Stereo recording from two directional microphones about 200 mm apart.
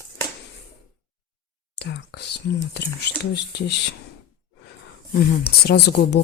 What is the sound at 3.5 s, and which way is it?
Speech, 55° left (ahead or behind).